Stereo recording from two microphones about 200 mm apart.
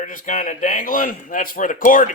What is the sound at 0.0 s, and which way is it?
A man's voice, 40° left (ahead or behind).